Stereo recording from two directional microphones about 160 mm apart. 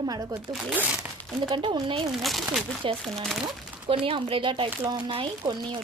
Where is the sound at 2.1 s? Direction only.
Centre (ahead or behind).